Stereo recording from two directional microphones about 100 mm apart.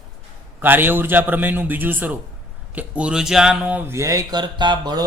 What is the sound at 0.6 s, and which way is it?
Speech, 20° right (ahead or behind).